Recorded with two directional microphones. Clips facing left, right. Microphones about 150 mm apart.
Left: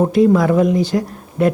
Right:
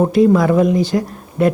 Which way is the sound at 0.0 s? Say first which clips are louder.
Right 1 dB; 25° right (ahead or behind).